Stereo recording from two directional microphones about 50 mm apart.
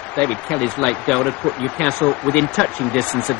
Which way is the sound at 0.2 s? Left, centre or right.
Left.